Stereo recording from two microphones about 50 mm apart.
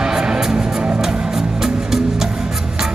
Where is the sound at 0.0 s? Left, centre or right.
Centre.